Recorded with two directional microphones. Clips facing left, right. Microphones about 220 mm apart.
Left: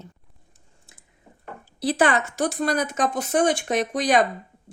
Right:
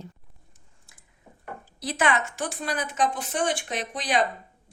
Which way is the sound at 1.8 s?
35° left (ahead or behind).